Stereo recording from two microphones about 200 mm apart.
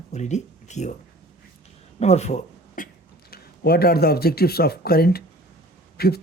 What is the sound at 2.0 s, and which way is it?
Speech, 35° left (ahead or behind).